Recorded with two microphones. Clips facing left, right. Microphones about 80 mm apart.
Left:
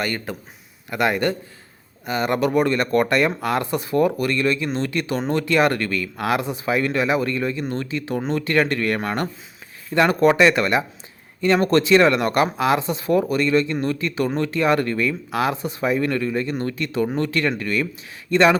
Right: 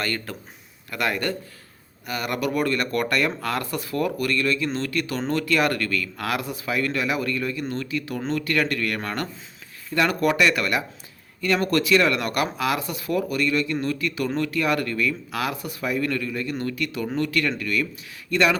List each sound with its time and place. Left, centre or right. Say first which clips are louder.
0.0 s a man's voice: left 3 dB; centre